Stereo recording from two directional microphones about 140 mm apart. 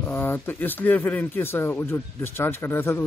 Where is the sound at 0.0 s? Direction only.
15° left (ahead or behind).